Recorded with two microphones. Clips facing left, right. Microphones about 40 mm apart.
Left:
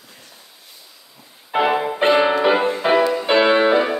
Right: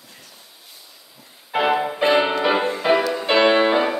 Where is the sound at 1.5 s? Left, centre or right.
Centre.